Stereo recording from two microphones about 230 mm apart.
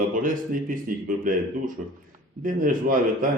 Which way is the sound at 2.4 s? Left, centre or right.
Right.